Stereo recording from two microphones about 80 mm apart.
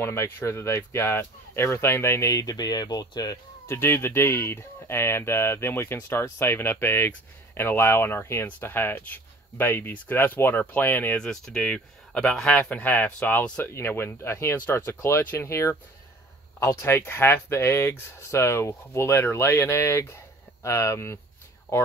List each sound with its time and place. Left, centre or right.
0.0 s speech: left
3.6 s speech: left
11.1 s speech: centre; by 21.8 s left